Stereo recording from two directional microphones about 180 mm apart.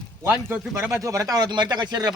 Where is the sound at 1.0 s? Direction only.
20° right (ahead or behind).